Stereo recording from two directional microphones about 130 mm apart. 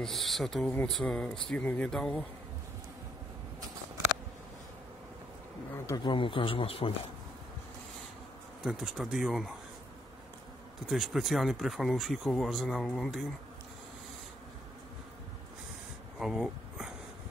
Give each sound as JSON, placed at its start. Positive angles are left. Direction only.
{"t": 0.0, "sound": "speech", "side_deg": 0}
{"t": 6.0, "sound": "speech", "side_deg": 40}
{"t": 8.6, "sound": "speech", "side_deg": 0}
{"t": 10.9, "sound": "speech", "side_deg": 0}
{"t": 16.2, "sound": "a sound", "side_deg": -5}